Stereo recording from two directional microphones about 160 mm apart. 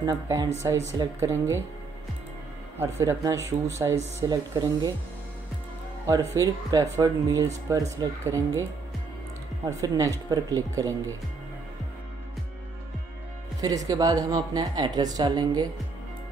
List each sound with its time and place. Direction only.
0.0 s a woman's voice: 20° right (ahead or behind)
2.8 s speech: 20° right (ahead or behind)
6.0 s a woman's voice: 20° right (ahead or behind)
9.7 s a woman's voice: 20° right (ahead or behind)
13.6 s a woman's voice: 20° right (ahead or behind)